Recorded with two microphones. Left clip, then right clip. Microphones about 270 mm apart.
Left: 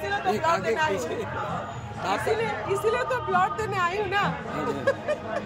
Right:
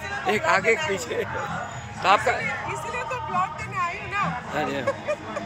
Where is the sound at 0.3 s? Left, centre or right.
Centre.